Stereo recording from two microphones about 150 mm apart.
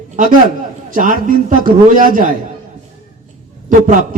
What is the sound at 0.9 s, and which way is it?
A man's voice, 60° right (ahead or behind).